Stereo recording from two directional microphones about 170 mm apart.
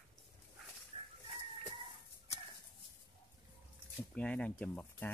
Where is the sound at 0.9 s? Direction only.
35° right (ahead or behind).